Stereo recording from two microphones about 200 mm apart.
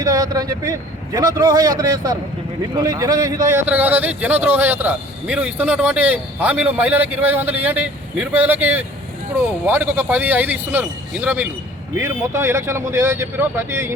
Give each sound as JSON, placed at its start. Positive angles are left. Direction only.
{"t": 0.0, "sound": "a man's voice", "side_deg": -20}